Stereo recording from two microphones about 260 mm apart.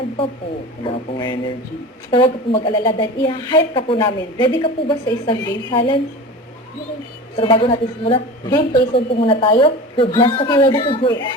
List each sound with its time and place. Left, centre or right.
0.9 s a woman's voice: centre
7.3 s a woman's voice: centre